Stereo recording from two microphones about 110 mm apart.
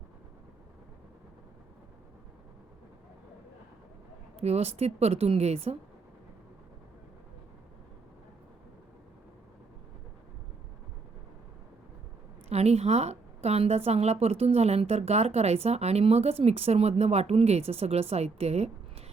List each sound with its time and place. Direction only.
4.4 s a woman's voice: 70° right (ahead or behind)
12.5 s a woman's voice: 70° right (ahead or behind)